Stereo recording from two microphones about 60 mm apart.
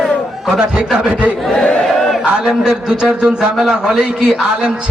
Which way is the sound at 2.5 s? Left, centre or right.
Centre.